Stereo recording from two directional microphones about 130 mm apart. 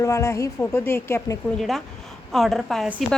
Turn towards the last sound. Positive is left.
turn(degrees=0)  # may be behind; listen again after turning